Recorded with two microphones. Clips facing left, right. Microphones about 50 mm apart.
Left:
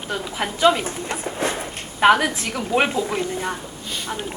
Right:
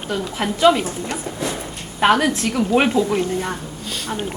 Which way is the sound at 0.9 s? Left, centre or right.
Left.